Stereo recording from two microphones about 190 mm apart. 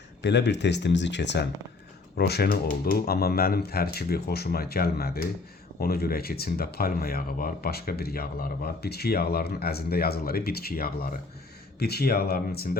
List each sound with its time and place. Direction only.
0.2 s speech: 65° left (ahead or behind)